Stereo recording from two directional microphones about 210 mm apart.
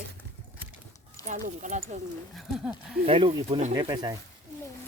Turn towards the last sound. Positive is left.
turn(degrees=-20)  # may be behind; listen again after turning